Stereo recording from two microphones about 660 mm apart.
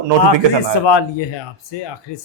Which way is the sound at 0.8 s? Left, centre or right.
Left.